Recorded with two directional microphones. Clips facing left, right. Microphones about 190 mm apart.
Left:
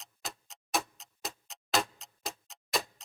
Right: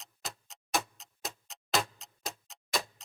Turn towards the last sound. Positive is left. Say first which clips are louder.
# left 1 dB
turn(degrees=0)  # may be behind; listen again after turning